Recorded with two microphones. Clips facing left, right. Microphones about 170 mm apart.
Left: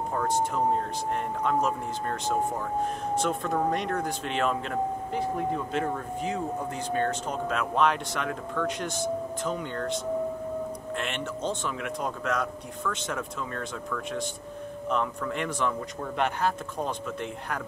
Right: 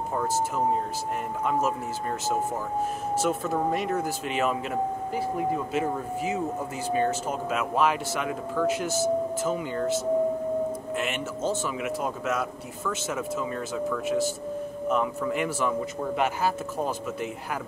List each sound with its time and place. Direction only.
0.1 s speech: 10° right (ahead or behind)
3.2 s a man's voice: 5° right (ahead or behind)